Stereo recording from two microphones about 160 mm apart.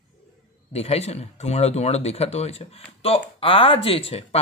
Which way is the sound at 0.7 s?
40° left (ahead or behind).